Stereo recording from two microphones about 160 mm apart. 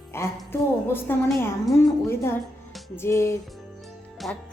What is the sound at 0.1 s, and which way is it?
A woman's voice, 15° left (ahead or behind).